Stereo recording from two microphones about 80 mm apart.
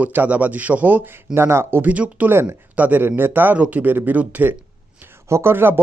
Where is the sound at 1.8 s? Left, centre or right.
Centre.